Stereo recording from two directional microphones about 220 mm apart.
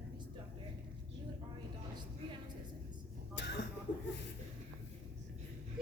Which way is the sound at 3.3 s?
50° left (ahead or behind).